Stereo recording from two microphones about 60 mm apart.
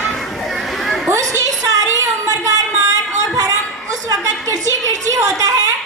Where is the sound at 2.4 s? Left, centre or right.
Right.